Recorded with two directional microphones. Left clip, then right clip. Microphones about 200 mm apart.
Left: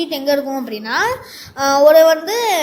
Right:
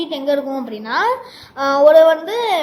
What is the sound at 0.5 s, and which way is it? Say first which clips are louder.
A woman's voice: left 1 dB; 35° left (ahead or behind).